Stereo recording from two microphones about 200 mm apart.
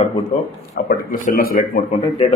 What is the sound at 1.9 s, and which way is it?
Speech, 30° left (ahead or behind).